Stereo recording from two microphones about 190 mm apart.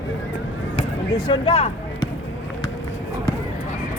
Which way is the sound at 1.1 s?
25° left (ahead or behind).